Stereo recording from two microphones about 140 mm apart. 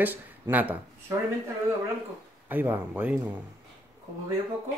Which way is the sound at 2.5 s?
15° right (ahead or behind).